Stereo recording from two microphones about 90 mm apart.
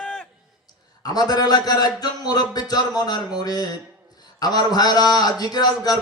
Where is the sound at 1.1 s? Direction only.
45° left (ahead or behind).